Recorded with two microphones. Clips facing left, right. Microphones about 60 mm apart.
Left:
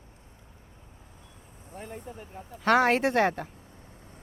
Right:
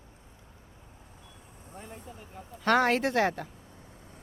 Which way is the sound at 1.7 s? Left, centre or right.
Left.